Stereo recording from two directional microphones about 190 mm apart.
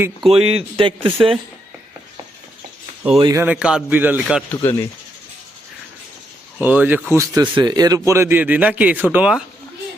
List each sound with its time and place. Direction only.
0.3 s speech: 30° right (ahead or behind)
3.1 s speech: 25° right (ahead or behind)
3.3 s speech: 10° right (ahead or behind)
4.5 s speech: 20° left (ahead or behind)
6.7 s speech: 10° right (ahead or behind)